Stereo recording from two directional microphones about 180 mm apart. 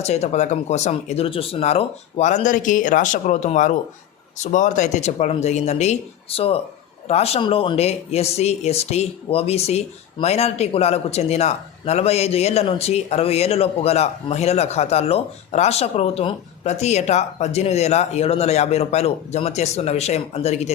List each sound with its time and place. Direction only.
0.0 s speech: 35° left (ahead or behind)